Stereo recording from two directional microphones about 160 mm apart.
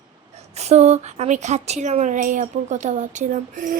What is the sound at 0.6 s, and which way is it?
Speech, 45° right (ahead or behind).